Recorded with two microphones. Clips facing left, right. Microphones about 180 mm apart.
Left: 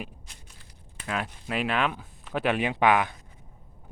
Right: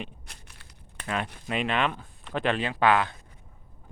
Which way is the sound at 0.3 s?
65° right (ahead or behind).